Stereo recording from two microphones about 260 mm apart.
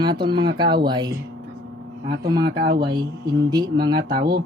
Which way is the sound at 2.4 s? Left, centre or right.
Right.